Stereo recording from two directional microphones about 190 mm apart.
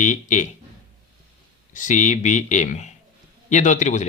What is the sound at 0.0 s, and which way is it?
Speech, 40° left (ahead or behind).